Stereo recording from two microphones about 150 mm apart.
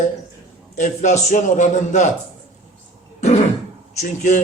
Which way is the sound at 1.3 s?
55° left (ahead or behind).